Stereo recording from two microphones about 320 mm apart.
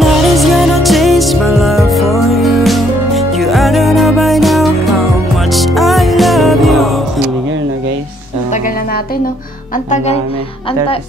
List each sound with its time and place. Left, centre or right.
0.0 s music: centre
8.5 s music: left